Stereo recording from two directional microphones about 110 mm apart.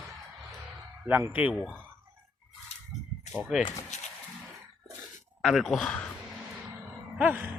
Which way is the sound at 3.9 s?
90° left.